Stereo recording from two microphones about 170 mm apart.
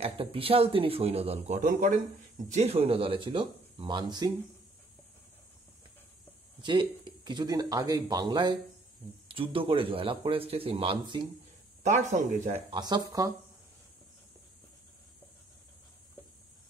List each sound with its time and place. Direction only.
0.0 s speech: 35° right (ahead or behind); by 2.0 s 50° right (ahead or behind)
2.5 s speech: 40° right (ahead or behind)
6.6 s speech: 30° right (ahead or behind)
11.8 s speech: 45° right (ahead or behind)
12.7 s speech: 25° right (ahead or behind)